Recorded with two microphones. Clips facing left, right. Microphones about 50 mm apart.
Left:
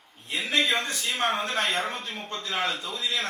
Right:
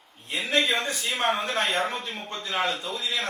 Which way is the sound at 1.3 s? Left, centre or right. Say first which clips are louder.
Right 1 dB; centre.